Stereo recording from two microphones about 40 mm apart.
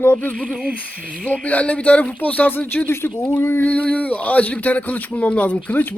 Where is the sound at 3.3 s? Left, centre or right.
Left.